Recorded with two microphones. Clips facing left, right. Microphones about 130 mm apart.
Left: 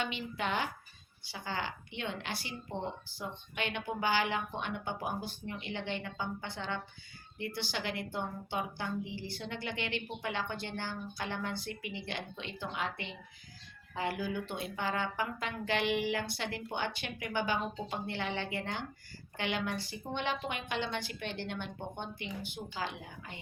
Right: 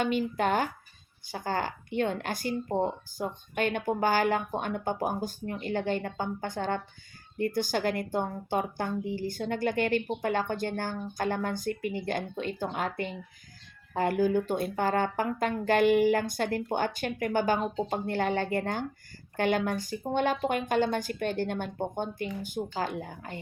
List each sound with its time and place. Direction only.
0.0 s a woman's voice: 45° right (ahead or behind)